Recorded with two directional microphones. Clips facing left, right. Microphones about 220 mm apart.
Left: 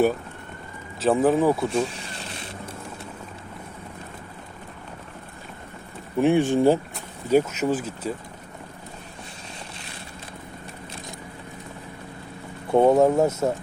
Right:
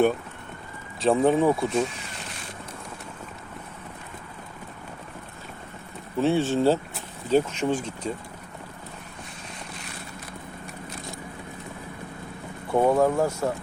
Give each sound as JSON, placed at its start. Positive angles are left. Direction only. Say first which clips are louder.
{"t": 1.0, "sound": "speech", "louder": "left 1 dB", "side_deg": 0}
{"t": 6.1, "sound": "speech", "louder": "left 3 dB", "side_deg": 15}
{"t": 12.7, "sound": "speech", "louder": "left 4 dB", "side_deg": 20}